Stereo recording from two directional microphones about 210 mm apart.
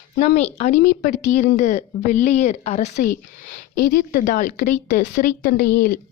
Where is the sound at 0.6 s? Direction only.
40° left (ahead or behind).